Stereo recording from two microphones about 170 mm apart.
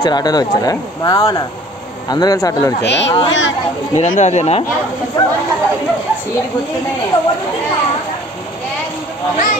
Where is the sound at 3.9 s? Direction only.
45° left (ahead or behind).